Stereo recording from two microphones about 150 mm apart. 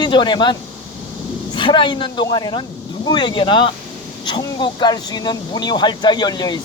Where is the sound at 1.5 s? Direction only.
35° left (ahead or behind).